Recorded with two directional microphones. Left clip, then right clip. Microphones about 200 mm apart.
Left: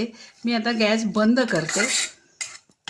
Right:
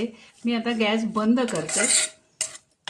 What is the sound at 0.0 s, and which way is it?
Speech, 55° left (ahead or behind).